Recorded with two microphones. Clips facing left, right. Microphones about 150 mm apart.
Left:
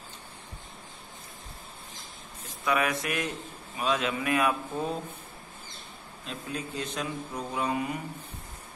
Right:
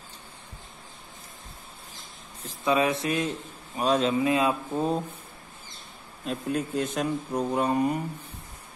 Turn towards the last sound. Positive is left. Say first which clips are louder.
# right 6 dB
turn(degrees=-45)  # may be behind; listen again after turning